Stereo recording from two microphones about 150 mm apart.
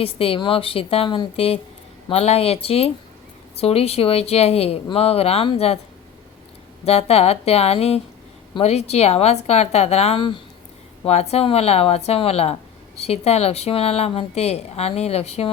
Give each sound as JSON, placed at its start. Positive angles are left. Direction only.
{"t": 0.0, "sound": "speech", "side_deg": 40}
{"t": 6.8, "sound": "a woman's voice", "side_deg": 45}
{"t": 11.0, "sound": "a woman's voice", "side_deg": 45}